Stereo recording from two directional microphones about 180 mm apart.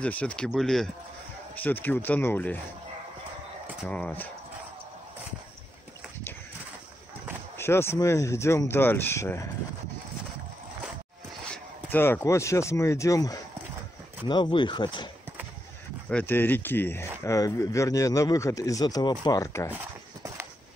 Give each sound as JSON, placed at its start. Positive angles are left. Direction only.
{"t": 0.0, "sound": "speech", "side_deg": 5}
{"t": 3.9, "sound": "speech", "side_deg": 10}
{"t": 7.5, "sound": "speech", "side_deg": 15}
{"t": 11.5, "sound": "speech", "side_deg": 10}
{"t": 16.1, "sound": "speech", "side_deg": 10}